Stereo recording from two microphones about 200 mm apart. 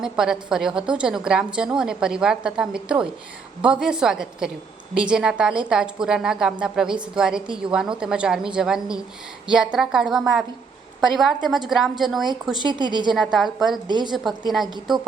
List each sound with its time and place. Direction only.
0.0 s a woman's voice: 5° right (ahead or behind)
12.6 s a woman's voice: 20° right (ahead or behind)
13.1 s a woman's voice: centre (ahead or behind)
13.8 s a woman's voice: 20° right (ahead or behind)